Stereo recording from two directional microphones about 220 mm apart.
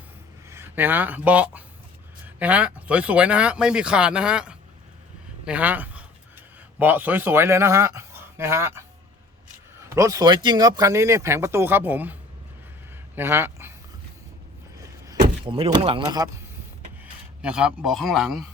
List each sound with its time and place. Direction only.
0.4 s a man's voice: 10° right (ahead or behind)
9.9 s speech: 15° right (ahead or behind)
13.1 s a man's voice: 10° right (ahead or behind)
14.8 s vehicle: 15° right (ahead or behind)
15.4 s speech: 25° right (ahead or behind)
17.0 s speech: 5° right (ahead or behind)